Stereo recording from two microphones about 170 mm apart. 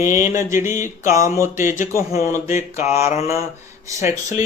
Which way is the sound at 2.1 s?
40° left (ahead or behind).